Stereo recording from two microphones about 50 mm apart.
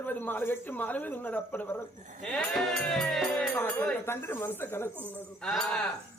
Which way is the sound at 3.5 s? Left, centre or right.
Left.